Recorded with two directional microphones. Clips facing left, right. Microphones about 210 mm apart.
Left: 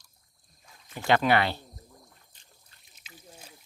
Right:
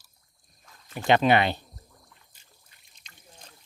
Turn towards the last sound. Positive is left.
turn(degrees=10)  # may be behind; listen again after turning